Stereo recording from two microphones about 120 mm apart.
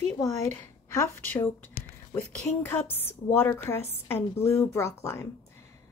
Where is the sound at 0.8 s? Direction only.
25° left (ahead or behind).